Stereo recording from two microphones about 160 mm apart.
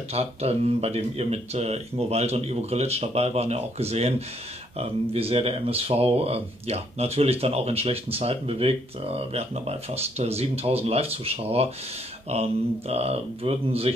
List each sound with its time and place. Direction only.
0.1 s speech: 40° right (ahead or behind)